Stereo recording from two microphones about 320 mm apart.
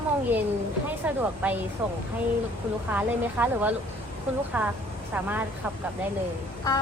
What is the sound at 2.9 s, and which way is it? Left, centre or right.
A woman's voice, centre.